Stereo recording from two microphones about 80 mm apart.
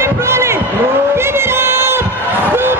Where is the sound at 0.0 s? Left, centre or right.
Right.